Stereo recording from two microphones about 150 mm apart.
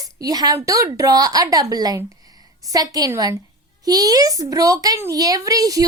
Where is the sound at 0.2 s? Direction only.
25° right (ahead or behind).